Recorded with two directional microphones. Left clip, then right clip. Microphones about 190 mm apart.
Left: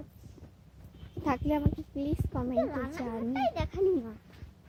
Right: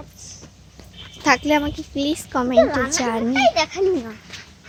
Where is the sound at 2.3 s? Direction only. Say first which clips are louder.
Right 16 dB; 20° right (ahead or behind).